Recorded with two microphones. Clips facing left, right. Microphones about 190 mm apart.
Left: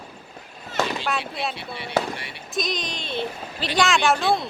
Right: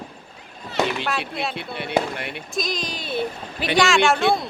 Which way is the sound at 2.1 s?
55° right (ahead or behind).